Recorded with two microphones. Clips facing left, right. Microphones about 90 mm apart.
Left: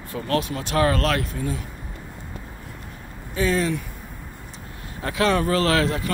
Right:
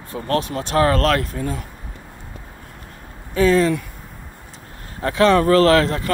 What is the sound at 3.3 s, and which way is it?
Speech, 55° right (ahead or behind).